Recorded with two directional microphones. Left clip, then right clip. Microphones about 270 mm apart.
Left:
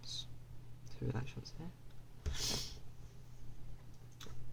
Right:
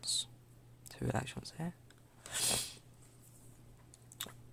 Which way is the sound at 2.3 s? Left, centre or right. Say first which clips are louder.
Right 4 dB; right.